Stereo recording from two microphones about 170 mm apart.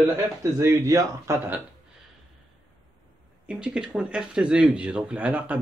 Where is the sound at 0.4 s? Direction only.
15° right (ahead or behind).